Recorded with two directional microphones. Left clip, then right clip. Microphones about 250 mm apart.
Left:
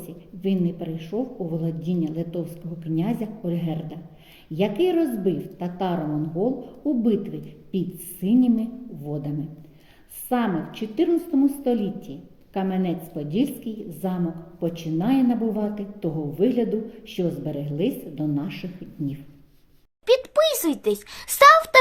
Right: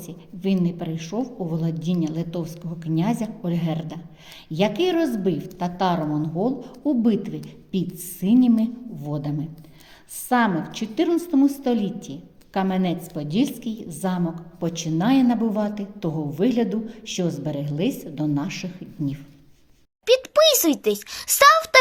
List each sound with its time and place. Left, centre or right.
0.0 s a woman's voice: centre
20.1 s a child's voice: centre